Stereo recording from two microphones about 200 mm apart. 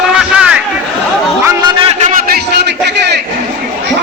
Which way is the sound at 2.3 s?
55° right (ahead or behind).